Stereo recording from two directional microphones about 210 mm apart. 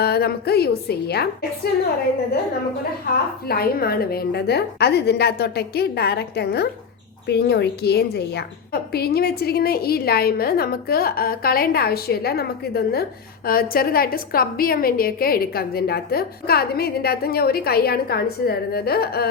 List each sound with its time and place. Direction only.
0.0 s a woman's voice: 50° left (ahead or behind)
3.4 s a woman's voice: 45° left (ahead or behind)